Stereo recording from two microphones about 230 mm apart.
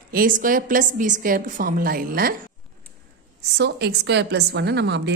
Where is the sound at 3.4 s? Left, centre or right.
Right.